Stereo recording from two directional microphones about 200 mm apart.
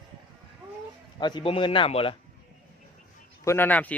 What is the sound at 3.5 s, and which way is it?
Speech, 10° left (ahead or behind).